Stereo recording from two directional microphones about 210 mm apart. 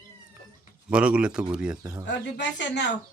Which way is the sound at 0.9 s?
5° right (ahead or behind).